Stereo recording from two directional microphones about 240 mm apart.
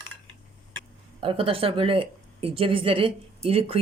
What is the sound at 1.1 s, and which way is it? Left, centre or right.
Speech, right.